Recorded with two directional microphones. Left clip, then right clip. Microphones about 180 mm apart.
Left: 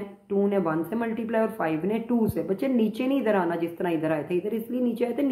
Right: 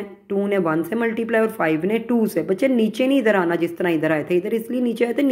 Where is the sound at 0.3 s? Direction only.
35° right (ahead or behind).